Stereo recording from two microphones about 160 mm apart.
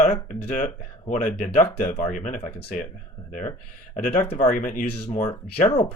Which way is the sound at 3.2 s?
50° left (ahead or behind).